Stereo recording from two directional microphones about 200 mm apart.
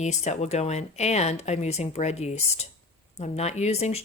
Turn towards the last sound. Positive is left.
turn(degrees=35)  # may be behind; listen again after turning